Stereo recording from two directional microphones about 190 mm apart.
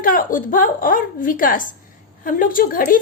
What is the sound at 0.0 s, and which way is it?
A woman's voice, 45° left (ahead or behind).